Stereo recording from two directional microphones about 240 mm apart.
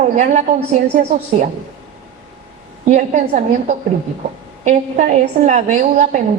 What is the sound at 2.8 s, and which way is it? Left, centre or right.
A woman's voice, right.